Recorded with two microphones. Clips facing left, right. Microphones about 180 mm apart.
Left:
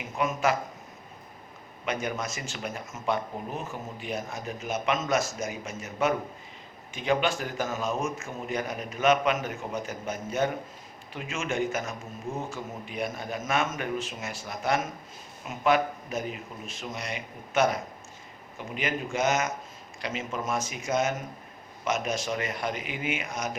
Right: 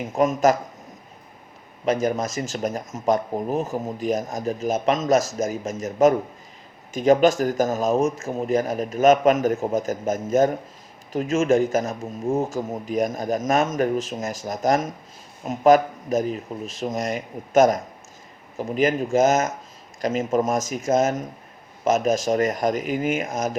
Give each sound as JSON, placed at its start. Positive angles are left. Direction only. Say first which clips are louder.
{"t": 0.0, "sound": "speech", "louder": "right 8 dB", "side_deg": -40}
{"t": 1.8, "sound": "a man's voice", "louder": "right 9 dB", "side_deg": -40}